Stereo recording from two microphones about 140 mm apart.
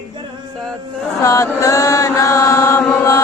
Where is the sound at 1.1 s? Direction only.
25° left (ahead or behind).